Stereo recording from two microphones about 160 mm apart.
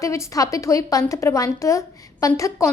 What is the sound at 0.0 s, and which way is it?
A woman's voice, 20° left (ahead or behind).